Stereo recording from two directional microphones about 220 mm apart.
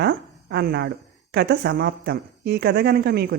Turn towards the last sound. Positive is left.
turn(degrees=-50)  # may be behind; listen again after turning